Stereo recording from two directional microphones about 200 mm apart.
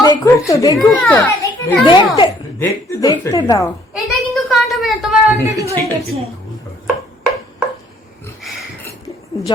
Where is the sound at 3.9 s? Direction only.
Centre (ahead or behind).